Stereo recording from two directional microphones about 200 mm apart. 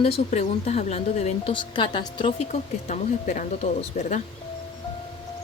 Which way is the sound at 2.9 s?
40° left (ahead or behind).